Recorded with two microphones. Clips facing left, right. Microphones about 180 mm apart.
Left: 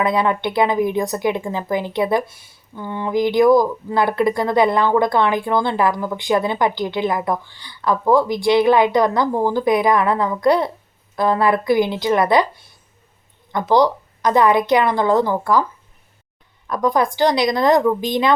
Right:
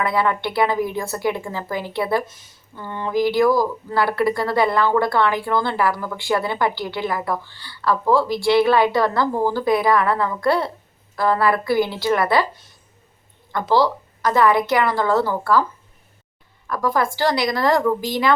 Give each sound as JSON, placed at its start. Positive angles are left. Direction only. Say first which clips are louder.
{"t": 0.0, "sound": "speech", "louder": "left 2 dB", "side_deg": 20}
{"t": 16.6, "sound": "speech", "louder": "left 3 dB", "side_deg": 20}